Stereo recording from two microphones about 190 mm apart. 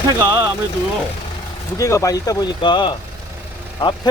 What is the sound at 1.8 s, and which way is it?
Speech, 15° left (ahead or behind).